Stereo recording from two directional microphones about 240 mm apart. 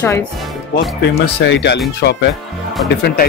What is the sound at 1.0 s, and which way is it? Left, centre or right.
Speech, left.